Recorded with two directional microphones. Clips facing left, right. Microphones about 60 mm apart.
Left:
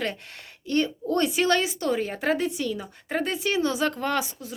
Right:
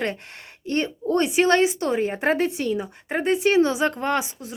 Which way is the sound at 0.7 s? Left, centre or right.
Right.